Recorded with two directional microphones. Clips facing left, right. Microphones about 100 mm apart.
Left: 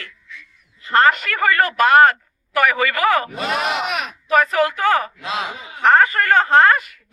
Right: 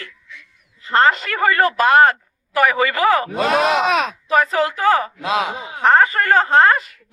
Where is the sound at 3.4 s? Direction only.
90° right.